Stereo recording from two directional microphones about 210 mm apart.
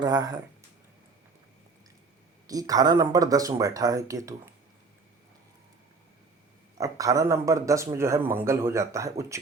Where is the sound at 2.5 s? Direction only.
15° right (ahead or behind).